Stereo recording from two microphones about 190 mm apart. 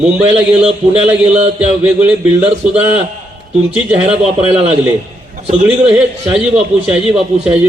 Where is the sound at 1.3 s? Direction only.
35° right (ahead or behind).